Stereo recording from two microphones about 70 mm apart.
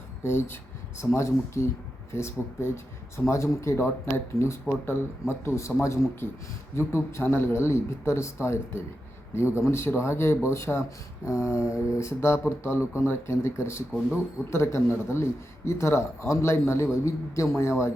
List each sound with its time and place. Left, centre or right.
0.2 s a man's voice: left